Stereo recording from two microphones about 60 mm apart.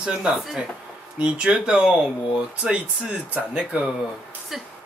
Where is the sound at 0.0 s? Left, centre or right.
Centre.